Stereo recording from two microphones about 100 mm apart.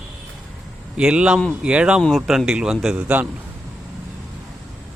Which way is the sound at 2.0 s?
Centre (ahead or behind).